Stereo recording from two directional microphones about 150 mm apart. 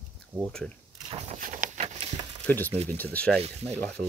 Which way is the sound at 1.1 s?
45° right (ahead or behind).